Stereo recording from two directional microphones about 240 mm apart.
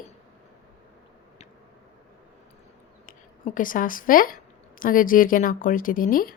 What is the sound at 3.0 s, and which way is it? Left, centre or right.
A woman's voice, left.